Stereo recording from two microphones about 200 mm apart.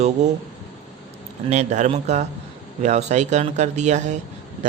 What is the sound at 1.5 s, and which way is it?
Speech, 35° right (ahead or behind).